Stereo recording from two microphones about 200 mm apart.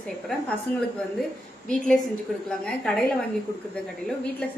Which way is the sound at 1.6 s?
5° left (ahead or behind).